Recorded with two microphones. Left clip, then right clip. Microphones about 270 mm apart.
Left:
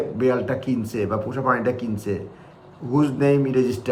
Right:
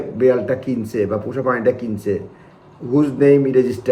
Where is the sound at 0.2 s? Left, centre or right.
Centre.